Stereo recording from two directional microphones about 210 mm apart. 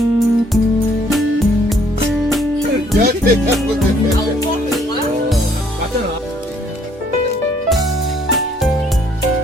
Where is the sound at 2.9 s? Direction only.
45° right (ahead or behind).